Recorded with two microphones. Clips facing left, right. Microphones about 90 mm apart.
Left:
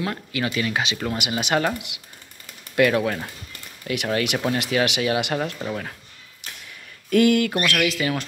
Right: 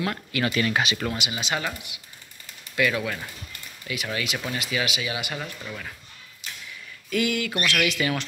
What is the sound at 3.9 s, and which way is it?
Speech, 55° left (ahead or behind).